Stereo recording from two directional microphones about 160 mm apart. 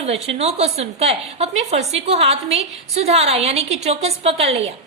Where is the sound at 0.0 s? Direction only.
40° right (ahead or behind).